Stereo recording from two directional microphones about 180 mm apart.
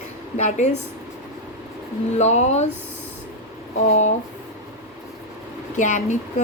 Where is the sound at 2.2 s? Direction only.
40° left (ahead or behind).